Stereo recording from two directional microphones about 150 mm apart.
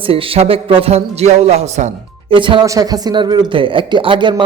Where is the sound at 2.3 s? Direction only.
35° right (ahead or behind).